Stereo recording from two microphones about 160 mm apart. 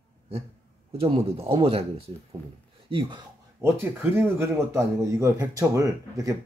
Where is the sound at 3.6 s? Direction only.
15° right (ahead or behind).